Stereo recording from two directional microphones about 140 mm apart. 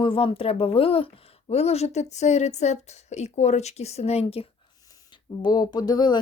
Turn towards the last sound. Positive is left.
turn(degrees=30)  # may be behind; listen again after turning